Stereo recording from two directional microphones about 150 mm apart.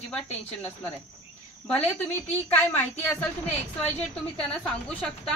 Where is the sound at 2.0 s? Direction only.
15° left (ahead or behind).